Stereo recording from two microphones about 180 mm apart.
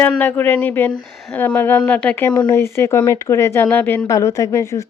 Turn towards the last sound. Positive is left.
turn(degrees=15)  # may be behind; listen again after turning